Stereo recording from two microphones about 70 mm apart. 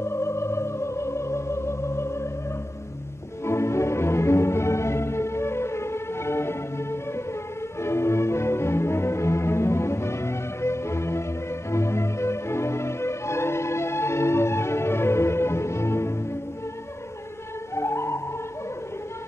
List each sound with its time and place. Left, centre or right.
0.0 s music: left
3.4 s music: left
17.7 s music: left